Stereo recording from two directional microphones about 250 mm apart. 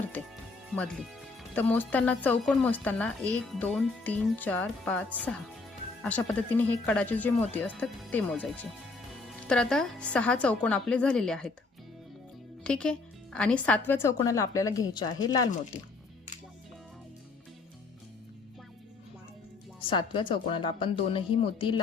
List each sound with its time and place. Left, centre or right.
0.8 s speech: centre
12.6 s speech: centre
15.7 s speech: left
19.8 s speech: centre